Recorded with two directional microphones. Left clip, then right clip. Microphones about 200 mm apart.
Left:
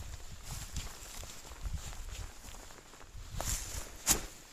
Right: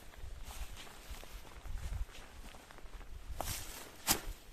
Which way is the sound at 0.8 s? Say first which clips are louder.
Left 4 dB; 55° left (ahead or behind).